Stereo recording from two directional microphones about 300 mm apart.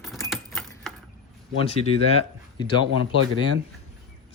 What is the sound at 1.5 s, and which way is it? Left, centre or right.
Speech, centre.